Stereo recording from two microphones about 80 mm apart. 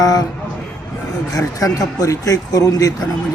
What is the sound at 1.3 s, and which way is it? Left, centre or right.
A man's voice, left.